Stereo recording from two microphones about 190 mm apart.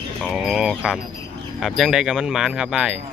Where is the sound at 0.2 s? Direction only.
Centre (ahead or behind).